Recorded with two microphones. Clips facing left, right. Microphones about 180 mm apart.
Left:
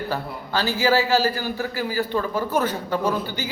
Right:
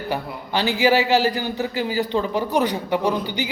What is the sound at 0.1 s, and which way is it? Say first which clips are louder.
A man's voice: right 1 dB; 15° right (ahead or behind).